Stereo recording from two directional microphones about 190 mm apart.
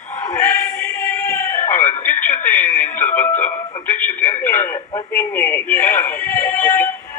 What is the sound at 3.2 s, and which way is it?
Music, 40° left (ahead or behind).